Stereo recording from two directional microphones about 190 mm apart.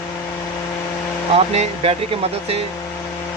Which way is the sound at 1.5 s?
30° right (ahead or behind).